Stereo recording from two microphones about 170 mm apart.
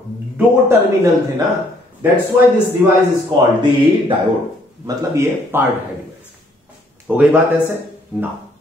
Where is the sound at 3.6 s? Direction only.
30° right (ahead or behind).